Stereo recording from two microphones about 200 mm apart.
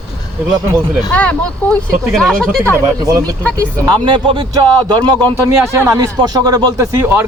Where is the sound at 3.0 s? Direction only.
15° right (ahead or behind).